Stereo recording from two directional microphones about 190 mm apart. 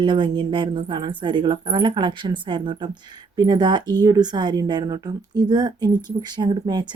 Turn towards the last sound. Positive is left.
turn(degrees=-20)  # may be behind; listen again after turning